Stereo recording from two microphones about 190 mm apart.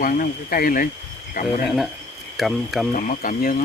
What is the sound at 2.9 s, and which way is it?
Speech, 45° left (ahead or behind).